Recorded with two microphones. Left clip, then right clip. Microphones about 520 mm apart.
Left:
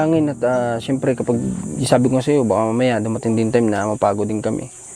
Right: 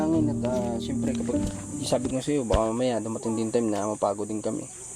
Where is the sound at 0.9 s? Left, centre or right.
Left.